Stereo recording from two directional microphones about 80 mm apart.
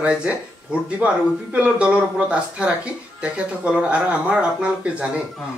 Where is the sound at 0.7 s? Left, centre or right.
Centre.